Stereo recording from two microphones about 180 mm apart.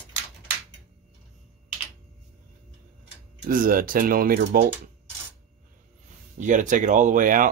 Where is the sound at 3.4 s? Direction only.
50° right (ahead or behind).